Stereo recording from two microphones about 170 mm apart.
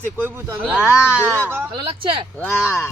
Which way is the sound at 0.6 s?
10° left (ahead or behind).